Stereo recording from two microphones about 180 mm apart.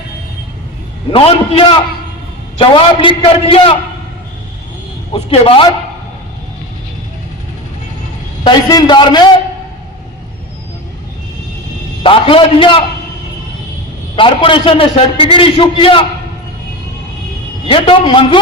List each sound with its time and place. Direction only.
1.1 s a man's voice: 30° left (ahead or behind)
5.1 s a man's voice: 30° left (ahead or behind)
8.4 s a man's voice: 25° left (ahead or behind)
12.0 s a man's voice: 30° left (ahead or behind)
14.2 s a man's voice: 30° left (ahead or behind)
17.7 s a man's voice: 30° left (ahead or behind)